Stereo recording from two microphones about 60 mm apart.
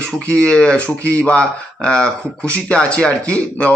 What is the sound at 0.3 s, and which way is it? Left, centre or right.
Speech, centre.